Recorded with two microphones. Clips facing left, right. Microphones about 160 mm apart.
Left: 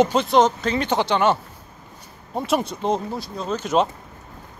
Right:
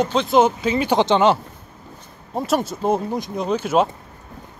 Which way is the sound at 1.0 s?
20° right (ahead or behind).